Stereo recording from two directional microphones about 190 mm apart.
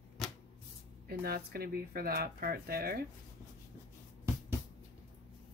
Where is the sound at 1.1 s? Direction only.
55° right (ahead or behind).